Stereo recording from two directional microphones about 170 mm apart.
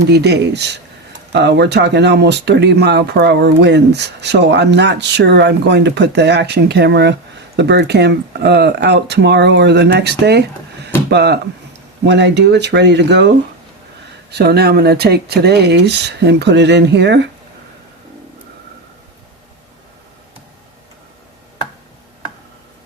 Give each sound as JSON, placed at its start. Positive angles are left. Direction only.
{"t": 0.1, "sound": "speech", "side_deg": -75}
{"t": 12.0, "sound": "speech", "side_deg": -90}
{"t": 14.3, "sound": "speech", "side_deg": -75}